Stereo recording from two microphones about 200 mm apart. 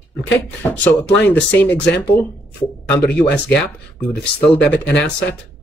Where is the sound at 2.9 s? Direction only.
10° left (ahead or behind).